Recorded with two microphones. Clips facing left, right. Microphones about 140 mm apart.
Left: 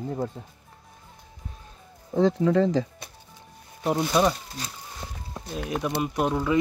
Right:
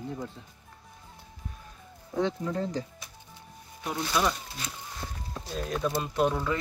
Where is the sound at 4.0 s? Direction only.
25° left (ahead or behind).